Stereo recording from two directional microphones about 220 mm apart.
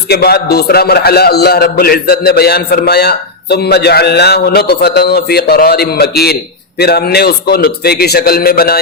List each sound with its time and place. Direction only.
0.1 s a man's voice: 45° left (ahead or behind)